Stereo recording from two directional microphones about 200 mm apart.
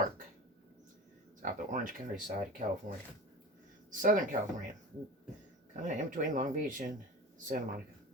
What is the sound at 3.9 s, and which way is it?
Speech, 40° right (ahead or behind).